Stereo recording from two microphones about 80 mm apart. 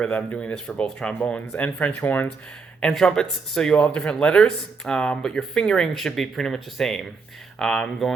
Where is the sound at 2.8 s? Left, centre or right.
Centre.